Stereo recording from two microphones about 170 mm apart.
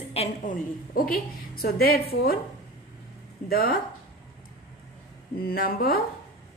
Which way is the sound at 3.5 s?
60° left (ahead or behind).